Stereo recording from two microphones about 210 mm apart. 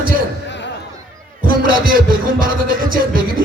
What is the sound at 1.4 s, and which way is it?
Music, 40° right (ahead or behind).